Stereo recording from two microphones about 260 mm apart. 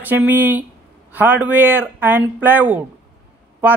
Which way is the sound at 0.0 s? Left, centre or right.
Centre.